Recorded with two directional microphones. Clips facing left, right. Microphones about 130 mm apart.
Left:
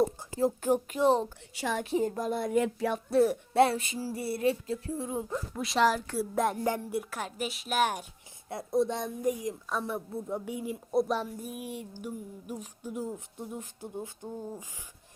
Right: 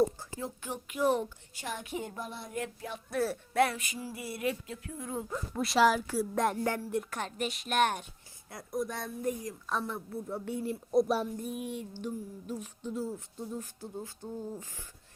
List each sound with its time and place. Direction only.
0.3 s speech: 40° left (ahead or behind)
0.9 s speech: 30° left (ahead or behind)
1.5 s a woman's voice: 90° left
1.8 s speech: 35° left (ahead or behind)
2.4 s speech: 80° left
3.1 s speech: 30° left (ahead or behind)
5.5 s a woman's voice: centre (ahead or behind)
6.6 s speech: 20° left (ahead or behind)
6.9 s a woman's voice: 5° left (ahead or behind)
8.4 s speech: 25° left (ahead or behind)
9.8 s a sound: 15° left (ahead or behind)
11.3 s a woman's voice: 5° left (ahead or behind)
11.9 s a sound: 15° left (ahead or behind)